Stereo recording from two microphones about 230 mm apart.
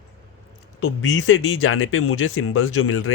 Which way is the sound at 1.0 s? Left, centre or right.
Left.